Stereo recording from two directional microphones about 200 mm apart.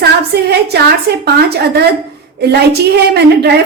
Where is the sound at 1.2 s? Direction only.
55° right (ahead or behind).